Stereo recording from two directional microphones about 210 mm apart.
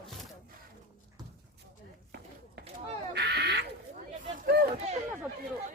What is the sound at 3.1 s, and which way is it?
Duck, 50° right (ahead or behind).